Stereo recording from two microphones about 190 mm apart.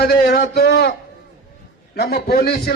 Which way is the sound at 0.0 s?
55° left (ahead or behind).